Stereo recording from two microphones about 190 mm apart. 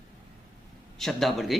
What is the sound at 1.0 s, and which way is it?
Speech, centre (ahead or behind).